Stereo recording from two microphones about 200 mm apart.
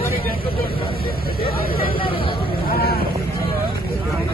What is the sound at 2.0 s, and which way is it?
Vehicle, 25° left (ahead or behind).